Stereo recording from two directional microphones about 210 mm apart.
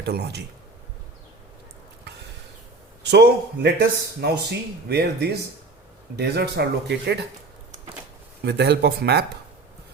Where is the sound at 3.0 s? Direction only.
55° right (ahead or behind).